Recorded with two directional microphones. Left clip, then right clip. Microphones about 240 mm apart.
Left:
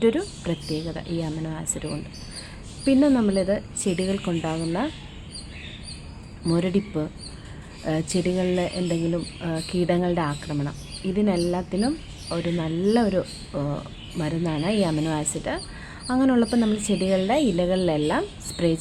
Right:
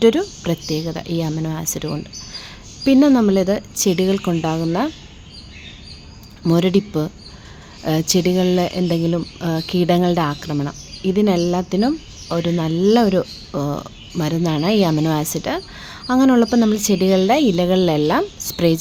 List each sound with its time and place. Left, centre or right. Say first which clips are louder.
0.0 s speech: right 7 dB; right
6.4 s speech: right 7 dB; right